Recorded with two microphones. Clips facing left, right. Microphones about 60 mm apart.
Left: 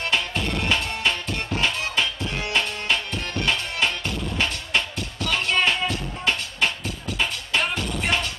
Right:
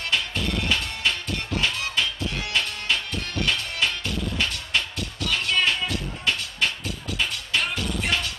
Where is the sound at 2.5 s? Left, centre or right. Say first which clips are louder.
Left 3 dB; left.